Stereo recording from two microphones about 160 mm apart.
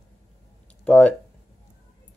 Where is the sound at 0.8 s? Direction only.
10° left (ahead or behind).